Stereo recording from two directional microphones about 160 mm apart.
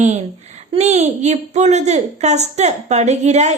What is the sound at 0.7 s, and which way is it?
A woman's voice, 45° right (ahead or behind).